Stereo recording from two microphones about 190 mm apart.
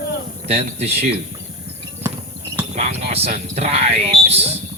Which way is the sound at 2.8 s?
35° right (ahead or behind).